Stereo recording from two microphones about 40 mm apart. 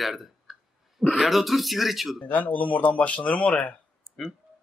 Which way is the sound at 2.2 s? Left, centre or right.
Left.